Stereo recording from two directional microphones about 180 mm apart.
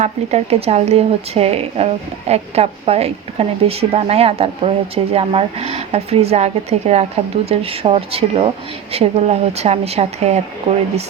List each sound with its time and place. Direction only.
0.0 s speech: 35° right (ahead or behind)